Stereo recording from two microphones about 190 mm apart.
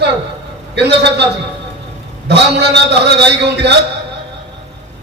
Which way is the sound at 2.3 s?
60° right (ahead or behind).